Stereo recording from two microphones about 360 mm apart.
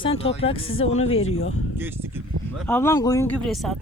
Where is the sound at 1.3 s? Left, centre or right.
Left.